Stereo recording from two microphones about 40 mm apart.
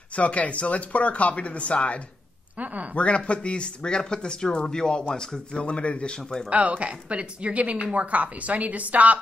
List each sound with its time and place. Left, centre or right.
0.1 s speech: left
2.5 s a woman's voice: right
3.0 s speech: left
5.6 s speech: left
6.1 s speech: centre
6.9 s a woman's voice: right